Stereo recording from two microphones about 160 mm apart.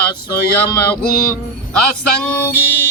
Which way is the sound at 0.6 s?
10° left (ahead or behind).